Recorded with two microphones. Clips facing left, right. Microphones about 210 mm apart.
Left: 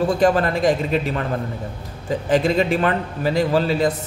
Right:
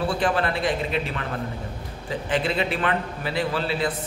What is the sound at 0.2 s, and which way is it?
A man's voice, 40° left (ahead or behind).